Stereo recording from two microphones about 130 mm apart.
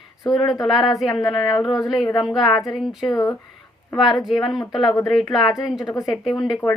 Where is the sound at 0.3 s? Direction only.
30° left (ahead or behind).